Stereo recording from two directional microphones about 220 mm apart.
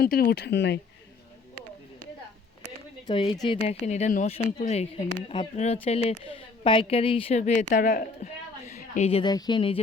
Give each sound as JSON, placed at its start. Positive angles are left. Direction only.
{"t": 0.0, "sound": "speech", "side_deg": 45}
{"t": 3.1, "sound": "a woman's voice", "side_deg": 20}